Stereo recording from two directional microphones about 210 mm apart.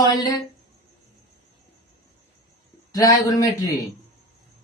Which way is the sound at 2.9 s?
15° left (ahead or behind).